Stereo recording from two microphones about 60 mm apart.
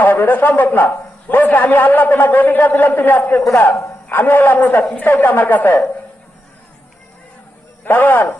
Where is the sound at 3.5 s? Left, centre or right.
Left.